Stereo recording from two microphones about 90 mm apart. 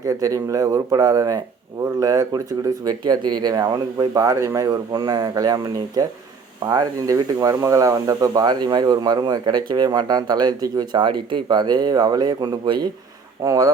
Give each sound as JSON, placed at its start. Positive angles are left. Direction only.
{"t": 0.0, "sound": "speech", "side_deg": -40}
{"t": 13.4, "sound": "speech", "side_deg": -40}